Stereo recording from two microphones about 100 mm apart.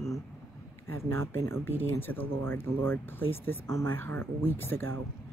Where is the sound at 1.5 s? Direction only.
20° left (ahead or behind).